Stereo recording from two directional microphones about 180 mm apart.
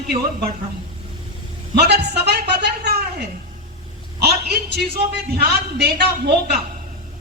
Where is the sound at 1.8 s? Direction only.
65° right (ahead or behind).